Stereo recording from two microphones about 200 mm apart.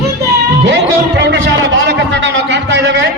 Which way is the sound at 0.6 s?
60° right (ahead or behind).